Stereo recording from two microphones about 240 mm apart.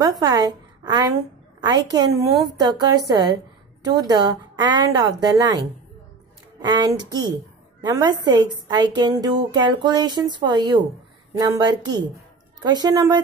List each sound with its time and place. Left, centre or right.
0.0 s a woman's voice: centre
6.6 s a woman's voice: centre